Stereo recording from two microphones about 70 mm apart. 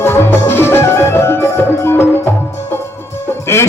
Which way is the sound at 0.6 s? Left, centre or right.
Left.